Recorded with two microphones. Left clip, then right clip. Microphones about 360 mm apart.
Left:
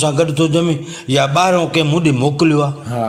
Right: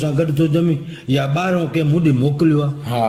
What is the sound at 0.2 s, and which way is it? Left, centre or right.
A man's voice, centre.